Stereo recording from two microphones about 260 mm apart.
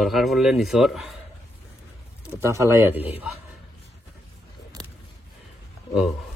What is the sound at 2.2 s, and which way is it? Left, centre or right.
Speech, centre.